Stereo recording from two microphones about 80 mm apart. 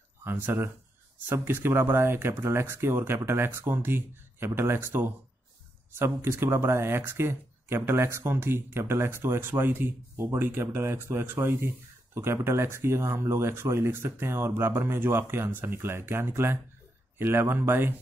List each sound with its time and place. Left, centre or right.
0.2 s speech: right